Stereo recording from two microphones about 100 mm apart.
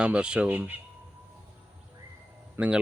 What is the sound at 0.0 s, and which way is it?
Speech, 10° right (ahead or behind).